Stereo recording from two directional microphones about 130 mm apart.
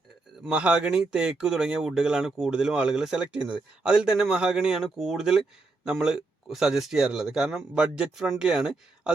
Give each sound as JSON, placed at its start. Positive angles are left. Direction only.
{"t": 0.3, "sound": "speech", "side_deg": -5}